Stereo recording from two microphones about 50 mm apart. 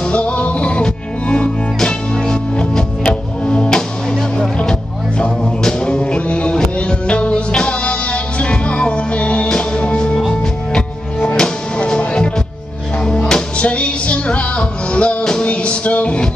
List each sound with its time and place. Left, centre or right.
0.0 s music: left
11.3 s music: centre